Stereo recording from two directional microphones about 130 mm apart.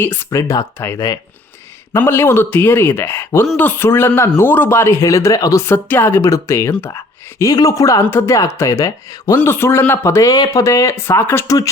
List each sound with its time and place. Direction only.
0.0 s a man's voice: 15° left (ahead or behind)